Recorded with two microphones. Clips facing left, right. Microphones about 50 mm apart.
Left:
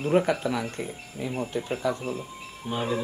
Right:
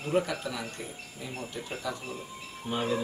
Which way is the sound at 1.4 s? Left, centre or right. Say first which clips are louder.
Left 9 dB; left.